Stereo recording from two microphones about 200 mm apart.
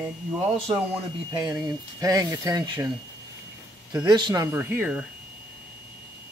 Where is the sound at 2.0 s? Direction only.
15° right (ahead or behind).